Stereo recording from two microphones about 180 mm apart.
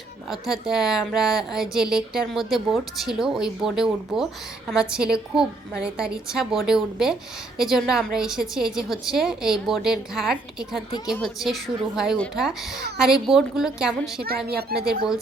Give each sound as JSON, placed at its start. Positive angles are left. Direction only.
{"t": 0.3, "sound": "speech", "side_deg": 0}
{"t": 14.2, "sound": "a woman's voice", "side_deg": -60}